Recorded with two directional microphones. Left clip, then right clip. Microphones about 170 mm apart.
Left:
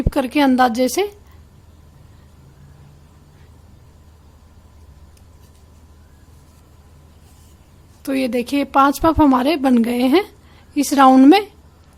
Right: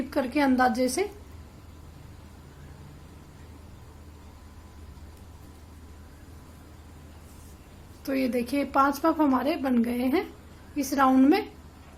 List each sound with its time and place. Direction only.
0.1 s speech: 40° left (ahead or behind)
8.0 s speech: 45° left (ahead or behind)